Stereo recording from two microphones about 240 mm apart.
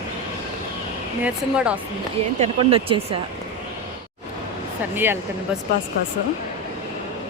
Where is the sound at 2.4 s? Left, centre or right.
Right.